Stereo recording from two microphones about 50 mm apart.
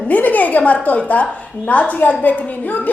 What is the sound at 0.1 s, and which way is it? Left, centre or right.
A woman's voice, left.